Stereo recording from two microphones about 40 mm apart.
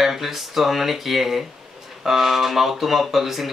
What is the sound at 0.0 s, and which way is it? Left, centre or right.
Speech, centre.